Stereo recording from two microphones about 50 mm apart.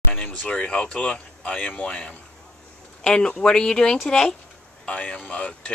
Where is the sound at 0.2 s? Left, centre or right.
Left.